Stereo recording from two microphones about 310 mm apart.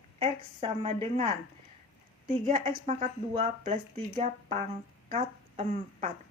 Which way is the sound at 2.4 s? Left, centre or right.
Right.